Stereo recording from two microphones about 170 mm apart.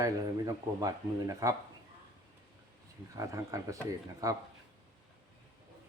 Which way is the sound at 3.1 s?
20° right (ahead or behind).